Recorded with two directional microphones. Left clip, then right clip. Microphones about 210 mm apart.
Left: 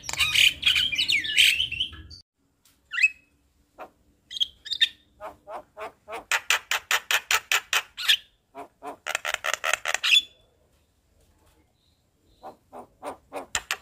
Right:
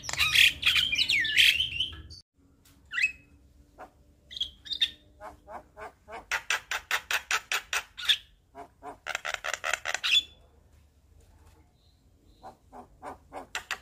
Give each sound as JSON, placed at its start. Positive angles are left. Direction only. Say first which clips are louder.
{"t": 0.0, "sound": "bird", "louder": "left 2 dB", "side_deg": -5}
{"t": 3.7, "sound": "bird", "louder": "left 5 dB", "side_deg": 30}
{"t": 12.4, "sound": "a sound", "louder": "left 5 dB", "side_deg": 30}